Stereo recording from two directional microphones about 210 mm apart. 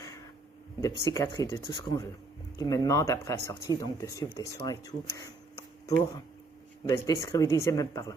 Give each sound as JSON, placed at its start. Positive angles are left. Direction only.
{"t": 1.0, "sound": "speech", "side_deg": 15}